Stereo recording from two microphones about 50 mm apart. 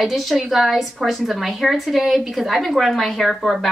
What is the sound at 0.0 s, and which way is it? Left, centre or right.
A woman's voice, centre.